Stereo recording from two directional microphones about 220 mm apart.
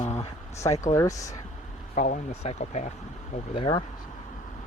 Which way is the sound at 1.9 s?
30° left (ahead or behind).